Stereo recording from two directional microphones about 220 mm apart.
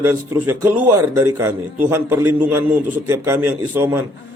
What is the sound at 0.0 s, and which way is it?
A man's voice, 10° right (ahead or behind).